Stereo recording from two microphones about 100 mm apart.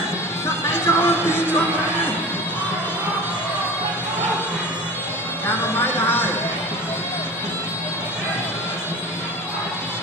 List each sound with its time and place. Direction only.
0.5 s music: 25° left (ahead or behind)
5.5 s speech: 20° left (ahead or behind)